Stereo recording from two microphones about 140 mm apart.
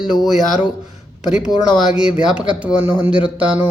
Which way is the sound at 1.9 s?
5° right (ahead or behind).